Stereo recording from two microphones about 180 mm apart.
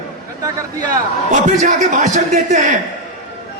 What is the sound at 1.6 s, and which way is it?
A man's voice, 45° right (ahead or behind).